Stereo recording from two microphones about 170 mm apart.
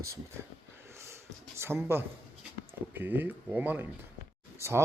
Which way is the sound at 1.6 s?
15° right (ahead or behind).